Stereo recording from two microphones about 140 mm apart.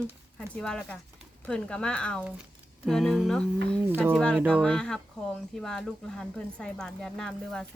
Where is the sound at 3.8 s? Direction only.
15° right (ahead or behind).